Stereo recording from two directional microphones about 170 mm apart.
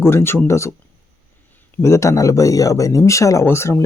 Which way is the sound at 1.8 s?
20° left (ahead or behind).